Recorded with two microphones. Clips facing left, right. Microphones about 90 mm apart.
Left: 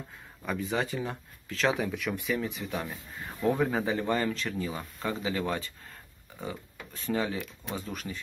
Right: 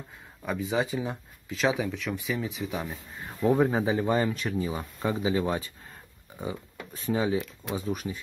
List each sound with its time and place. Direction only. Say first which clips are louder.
0.5 s speech: right 3 dB; 5° right (ahead or behind)
3.8 s speech: right 3 dB; 15° right (ahead or behind)